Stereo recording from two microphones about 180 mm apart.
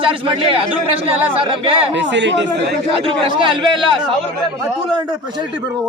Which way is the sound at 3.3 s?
25° right (ahead or behind).